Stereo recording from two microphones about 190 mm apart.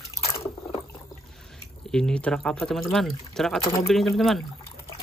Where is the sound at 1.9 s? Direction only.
5° left (ahead or behind).